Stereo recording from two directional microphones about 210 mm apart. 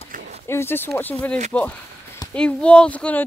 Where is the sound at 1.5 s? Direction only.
5° left (ahead or behind).